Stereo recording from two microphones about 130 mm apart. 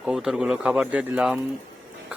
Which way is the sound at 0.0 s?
5° right (ahead or behind).